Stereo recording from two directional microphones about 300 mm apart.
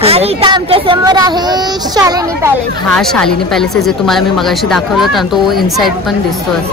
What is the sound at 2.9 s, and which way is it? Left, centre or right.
A woman's voice, centre.